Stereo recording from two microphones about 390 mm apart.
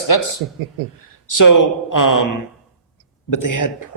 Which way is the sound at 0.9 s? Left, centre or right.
Left.